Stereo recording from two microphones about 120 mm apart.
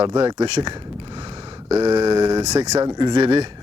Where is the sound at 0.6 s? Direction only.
45° right (ahead or behind).